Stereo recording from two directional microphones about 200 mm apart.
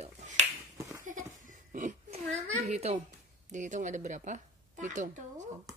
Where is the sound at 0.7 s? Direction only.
15° right (ahead or behind).